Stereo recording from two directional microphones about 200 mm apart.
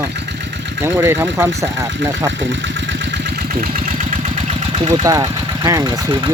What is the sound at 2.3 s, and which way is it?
Vehicle, 65° right (ahead or behind).